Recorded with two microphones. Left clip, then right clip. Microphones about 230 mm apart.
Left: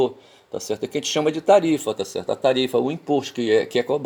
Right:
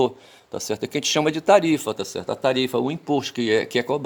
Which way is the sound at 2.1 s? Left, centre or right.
Right.